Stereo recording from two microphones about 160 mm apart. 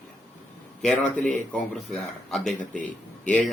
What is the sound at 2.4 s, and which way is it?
Speech, 50° left (ahead or behind).